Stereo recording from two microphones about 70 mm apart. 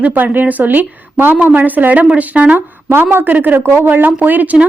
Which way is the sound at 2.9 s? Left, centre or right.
Right.